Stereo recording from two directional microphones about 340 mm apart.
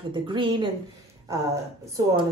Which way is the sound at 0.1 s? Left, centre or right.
Centre.